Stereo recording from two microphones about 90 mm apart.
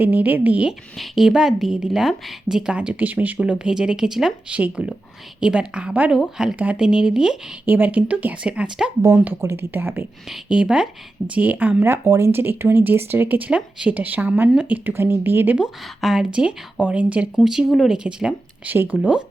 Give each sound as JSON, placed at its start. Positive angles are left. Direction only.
{"t": 0.0, "sound": "speech", "side_deg": -20}
{"t": 0.9, "sound": "a woman's voice", "side_deg": -5}
{"t": 7.6, "sound": "a woman's voice", "side_deg": -20}
{"t": 9.0, "sound": "speech", "side_deg": -35}
{"t": 10.2, "sound": "a woman's voice", "side_deg": -10}
{"t": 11.8, "sound": "speech", "side_deg": -30}
{"t": 15.5, "sound": "a woman's voice", "side_deg": -5}